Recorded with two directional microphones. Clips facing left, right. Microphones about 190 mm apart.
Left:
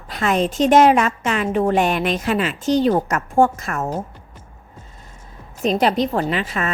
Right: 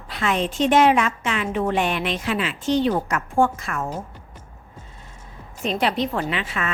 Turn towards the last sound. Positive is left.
turn(degrees=40)  # may be behind; listen again after turning